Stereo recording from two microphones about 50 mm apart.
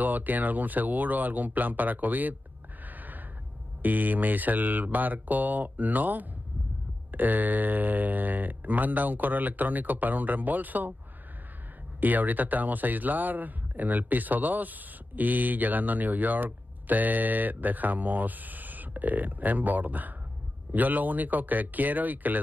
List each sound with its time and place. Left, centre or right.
0.0 s speech: right
2.8 s gasp: right
3.8 s speech: right
12.0 s speech: right